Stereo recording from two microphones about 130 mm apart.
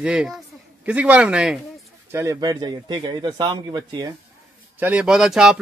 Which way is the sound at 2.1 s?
25° right (ahead or behind).